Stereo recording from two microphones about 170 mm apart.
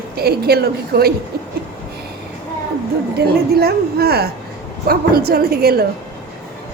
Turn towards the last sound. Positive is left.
turn(degrees=-65)  # may be behind; listen again after turning